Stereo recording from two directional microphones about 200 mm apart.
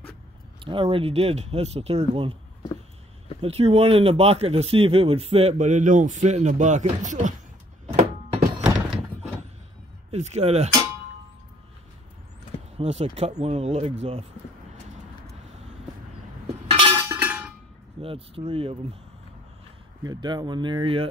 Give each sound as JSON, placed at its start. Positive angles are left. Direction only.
{"t": 0.7, "sound": "speech", "side_deg": -25}
{"t": 3.3, "sound": "speech", "side_deg": -30}
{"t": 7.9, "sound": "thunk", "side_deg": -35}
{"t": 8.6, "sound": "thunk", "side_deg": 0}
{"t": 10.1, "sound": "speech", "side_deg": -35}
{"t": 12.7, "sound": "speech", "side_deg": -30}
{"t": 16.6, "sound": "a sound", "side_deg": -25}
{"t": 17.0, "sound": "a sound", "side_deg": -10}
{"t": 18.0, "sound": "speech", "side_deg": -30}
{"t": 20.0, "sound": "speech", "side_deg": -20}